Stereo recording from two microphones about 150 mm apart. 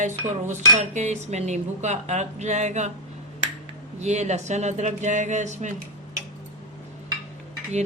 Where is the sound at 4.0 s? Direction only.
50° right (ahead or behind).